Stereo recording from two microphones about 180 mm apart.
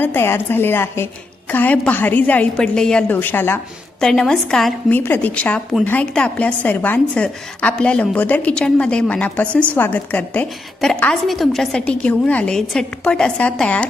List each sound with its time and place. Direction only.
0.0 s a woman's voice: 10° left (ahead or behind)